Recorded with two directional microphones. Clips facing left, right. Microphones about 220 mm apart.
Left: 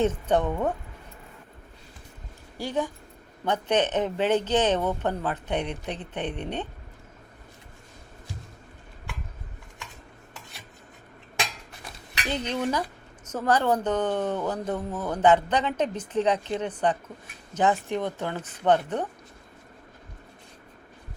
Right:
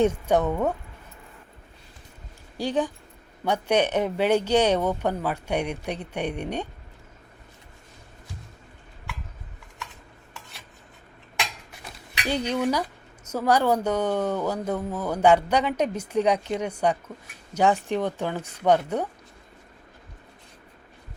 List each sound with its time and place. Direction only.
0.0 s speech: 10° right (ahead or behind)
2.6 s speech: 15° right (ahead or behind)
12.3 s speech: 10° right (ahead or behind)